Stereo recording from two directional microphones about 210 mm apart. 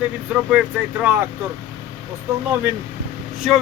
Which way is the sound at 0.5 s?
5° right (ahead or behind).